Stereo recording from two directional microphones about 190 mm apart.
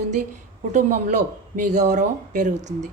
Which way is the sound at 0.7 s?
40° right (ahead or behind).